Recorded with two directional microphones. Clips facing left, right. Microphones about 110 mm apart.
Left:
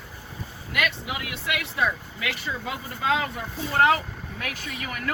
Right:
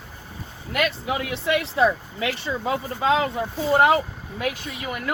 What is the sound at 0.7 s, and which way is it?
Speech, 35° right (ahead or behind).